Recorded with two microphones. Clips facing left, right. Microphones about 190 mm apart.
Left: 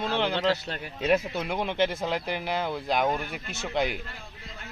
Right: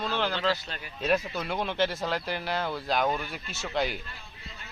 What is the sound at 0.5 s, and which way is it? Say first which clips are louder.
Speech: left 3 dB; 70° left (ahead or behind).